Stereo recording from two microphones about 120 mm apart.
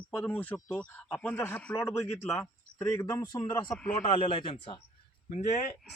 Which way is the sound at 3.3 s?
35° left (ahead or behind).